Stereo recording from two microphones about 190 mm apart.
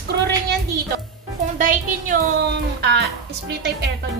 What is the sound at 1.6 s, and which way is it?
Speech, 45° right (ahead or behind).